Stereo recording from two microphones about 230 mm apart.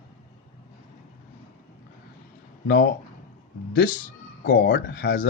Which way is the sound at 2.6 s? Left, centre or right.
Left.